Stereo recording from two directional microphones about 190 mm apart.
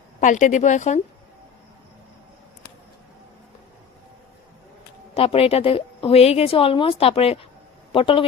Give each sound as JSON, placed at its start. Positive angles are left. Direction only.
{"t": 0.2, "sound": "a woman's voice", "side_deg": 40}
{"t": 5.1, "sound": "a woman's voice", "side_deg": 30}